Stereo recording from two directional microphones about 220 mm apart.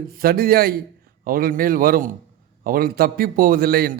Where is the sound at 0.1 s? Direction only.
40° right (ahead or behind).